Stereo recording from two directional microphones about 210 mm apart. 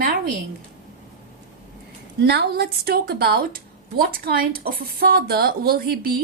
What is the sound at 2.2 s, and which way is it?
A woman's voice, 50° right (ahead or behind).